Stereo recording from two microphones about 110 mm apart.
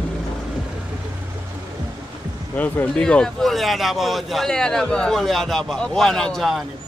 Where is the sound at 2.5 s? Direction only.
15° left (ahead or behind).